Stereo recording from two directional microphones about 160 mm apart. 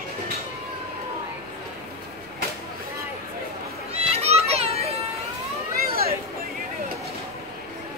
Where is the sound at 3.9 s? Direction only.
40° right (ahead or behind).